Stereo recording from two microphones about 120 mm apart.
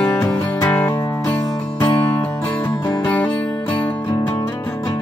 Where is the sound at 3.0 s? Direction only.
15° left (ahead or behind).